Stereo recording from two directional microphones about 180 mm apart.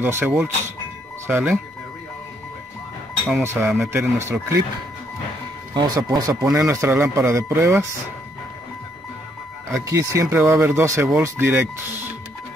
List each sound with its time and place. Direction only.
0.0 s speech: 10° right (ahead or behind)
3.4 s speech: 10° right (ahead or behind)
5.8 s speech: 25° right (ahead or behind)
9.7 s speech: 15° right (ahead or behind)